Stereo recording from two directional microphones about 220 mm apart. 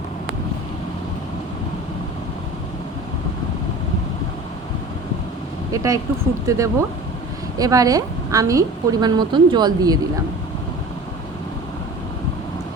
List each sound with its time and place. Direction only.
5.7 s a woman's voice: 15° right (ahead or behind)